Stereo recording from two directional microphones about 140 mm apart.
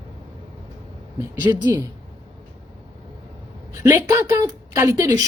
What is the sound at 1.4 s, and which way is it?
Speech, 30° right (ahead or behind).